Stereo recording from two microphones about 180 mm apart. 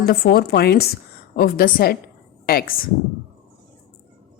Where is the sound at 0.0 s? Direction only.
60° left (ahead or behind).